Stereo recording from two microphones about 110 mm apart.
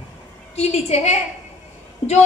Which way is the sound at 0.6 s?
75° left (ahead or behind).